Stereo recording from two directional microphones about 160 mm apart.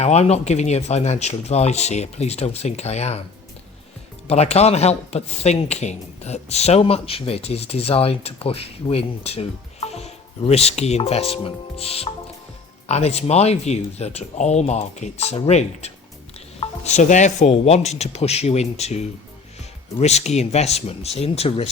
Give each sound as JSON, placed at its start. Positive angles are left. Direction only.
{"t": 0.0, "sound": "speech", "side_deg": 40}
{"t": 4.3, "sound": "speech", "side_deg": 40}